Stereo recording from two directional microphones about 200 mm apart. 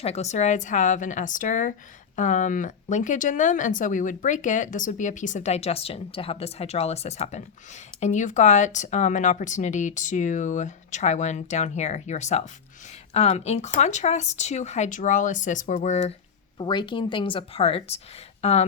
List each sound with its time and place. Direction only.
0.0 s speech: 30° left (ahead or behind)
16.6 s speech: 25° left (ahead or behind)